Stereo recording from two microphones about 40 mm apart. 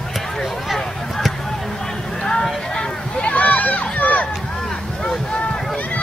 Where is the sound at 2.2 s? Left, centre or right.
Centre.